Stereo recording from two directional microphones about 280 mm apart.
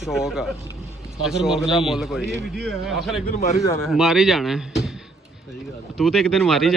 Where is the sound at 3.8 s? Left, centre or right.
Centre.